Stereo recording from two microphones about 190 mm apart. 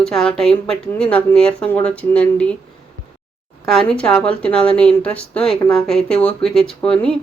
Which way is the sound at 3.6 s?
Centre (ahead or behind).